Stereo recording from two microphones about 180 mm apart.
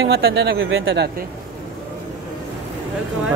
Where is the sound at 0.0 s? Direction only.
65° right (ahead or behind); by 1.1 s 80° right.